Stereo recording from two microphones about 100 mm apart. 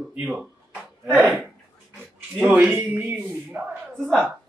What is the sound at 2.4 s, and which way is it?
A man's voice, 10° right (ahead or behind).